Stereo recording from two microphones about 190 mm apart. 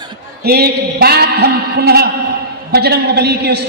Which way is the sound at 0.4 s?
55° right (ahead or behind).